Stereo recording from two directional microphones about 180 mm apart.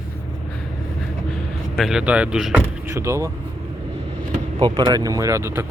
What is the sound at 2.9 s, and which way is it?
Speech, 15° right (ahead or behind).